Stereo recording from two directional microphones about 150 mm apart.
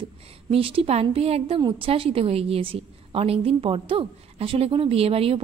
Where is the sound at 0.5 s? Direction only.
40° right (ahead or behind).